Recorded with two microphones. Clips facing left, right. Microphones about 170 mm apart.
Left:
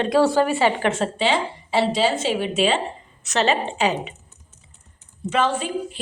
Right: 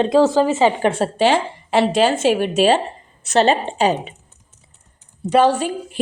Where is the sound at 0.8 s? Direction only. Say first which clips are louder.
Right 5 dB; 35° right (ahead or behind).